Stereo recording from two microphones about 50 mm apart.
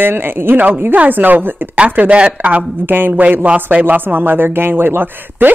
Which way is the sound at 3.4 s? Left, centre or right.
Right.